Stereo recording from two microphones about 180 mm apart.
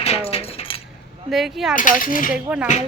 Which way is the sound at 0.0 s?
35° left (ahead or behind).